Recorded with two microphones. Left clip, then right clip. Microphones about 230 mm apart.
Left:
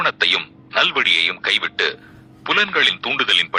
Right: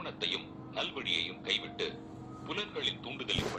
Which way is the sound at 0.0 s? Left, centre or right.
Left.